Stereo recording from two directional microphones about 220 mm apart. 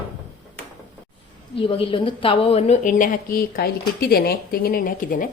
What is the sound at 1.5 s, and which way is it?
A woman's voice, 25° left (ahead or behind).